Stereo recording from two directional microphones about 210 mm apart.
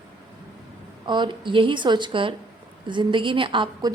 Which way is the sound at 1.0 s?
20° right (ahead or behind).